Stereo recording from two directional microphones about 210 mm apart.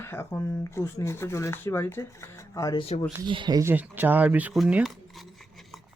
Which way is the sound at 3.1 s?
20° right (ahead or behind).